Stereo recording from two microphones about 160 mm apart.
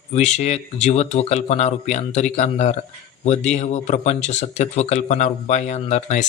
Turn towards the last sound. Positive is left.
turn(degrees=45)  # may be behind; listen again after turning